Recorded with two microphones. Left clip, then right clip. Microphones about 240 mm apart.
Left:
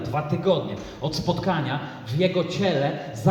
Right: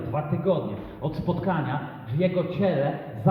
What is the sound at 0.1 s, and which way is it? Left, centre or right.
A man's voice, left.